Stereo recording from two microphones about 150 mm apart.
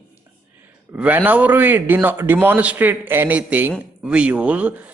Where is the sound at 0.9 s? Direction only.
10° right (ahead or behind).